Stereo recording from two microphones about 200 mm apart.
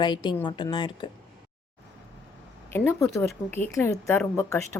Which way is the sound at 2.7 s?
10° left (ahead or behind).